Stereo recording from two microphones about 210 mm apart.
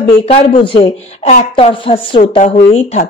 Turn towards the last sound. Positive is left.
turn(degrees=30)  # may be behind; listen again after turning